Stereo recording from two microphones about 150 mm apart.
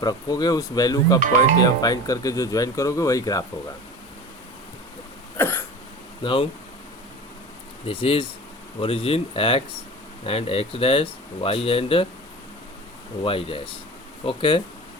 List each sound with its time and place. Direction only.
0.0 s speech: 25° left (ahead or behind)
5.4 s cough: 15° left (ahead or behind)
6.2 s speech: 35° left (ahead or behind)
7.9 s speech: 40° left (ahead or behind)
13.2 s speech: 35° left (ahead or behind)